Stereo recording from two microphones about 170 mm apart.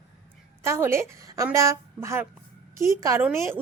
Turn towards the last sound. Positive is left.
turn(degrees=-15)  # may be behind; listen again after turning